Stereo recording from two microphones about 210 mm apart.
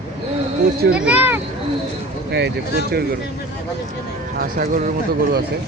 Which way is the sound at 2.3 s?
55° right (ahead or behind).